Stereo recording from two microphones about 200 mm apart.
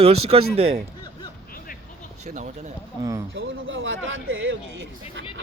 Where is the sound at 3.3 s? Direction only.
75° right (ahead or behind).